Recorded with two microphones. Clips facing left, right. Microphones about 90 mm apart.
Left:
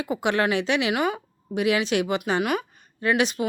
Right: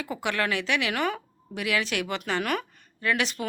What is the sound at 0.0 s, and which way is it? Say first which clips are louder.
Speech: left 5 dB; 20° left (ahead or behind).